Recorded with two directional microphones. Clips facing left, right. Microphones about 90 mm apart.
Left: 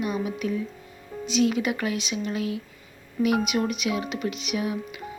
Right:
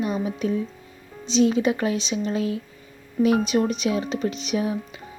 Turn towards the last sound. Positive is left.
turn(degrees=-35)  # may be behind; listen again after turning